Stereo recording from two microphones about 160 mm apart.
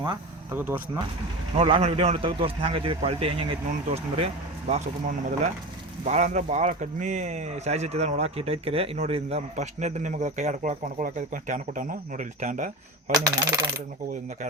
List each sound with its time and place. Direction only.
0.5 s speech: 15° right (ahead or behind)
1.5 s speech: 35° right (ahead or behind); by 12.7 s 55° right (ahead or behind)
13.1 s coin: 25° right (ahead or behind)